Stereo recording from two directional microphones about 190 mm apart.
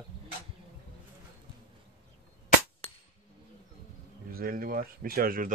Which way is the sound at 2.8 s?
30° left (ahead or behind).